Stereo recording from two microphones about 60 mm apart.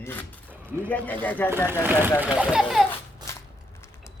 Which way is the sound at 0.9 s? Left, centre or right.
Left.